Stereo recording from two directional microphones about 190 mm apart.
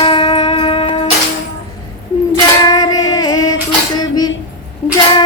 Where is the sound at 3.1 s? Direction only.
20° left (ahead or behind).